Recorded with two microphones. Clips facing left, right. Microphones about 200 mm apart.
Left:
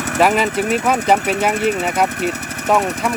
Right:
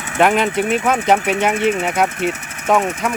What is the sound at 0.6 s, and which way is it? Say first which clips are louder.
Speech: even; 40° left (ahead or behind).